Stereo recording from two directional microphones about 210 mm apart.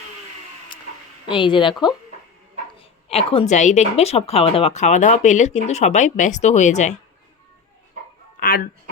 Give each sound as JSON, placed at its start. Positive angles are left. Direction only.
{"t": 1.3, "sound": "a woman's voice", "side_deg": 25}
{"t": 8.4, "sound": "speech", "side_deg": 45}